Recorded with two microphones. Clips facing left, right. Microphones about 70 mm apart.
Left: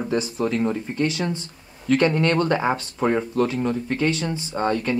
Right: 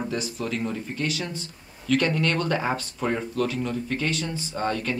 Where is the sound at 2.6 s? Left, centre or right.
Left.